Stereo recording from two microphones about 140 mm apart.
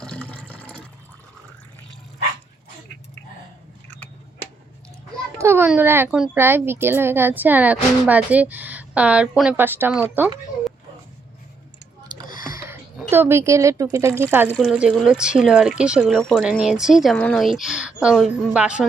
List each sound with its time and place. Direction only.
0.0 s water: 5° left (ahead or behind)
5.4 s a woman's voice: 15° right (ahead or behind)
12.3 s a sound: 90° left
13.1 s speech: 15° right (ahead or behind)
17.2 s speech: 10° left (ahead or behind)
17.4 s speech: 5° right (ahead or behind)